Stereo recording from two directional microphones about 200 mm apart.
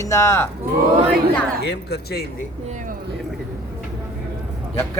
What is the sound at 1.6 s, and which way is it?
Speech, 55° left (ahead or behind).